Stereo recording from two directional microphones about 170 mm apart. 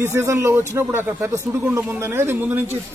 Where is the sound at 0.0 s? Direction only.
15° right (ahead or behind).